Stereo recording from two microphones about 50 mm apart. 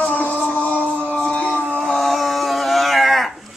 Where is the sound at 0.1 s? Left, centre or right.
Left.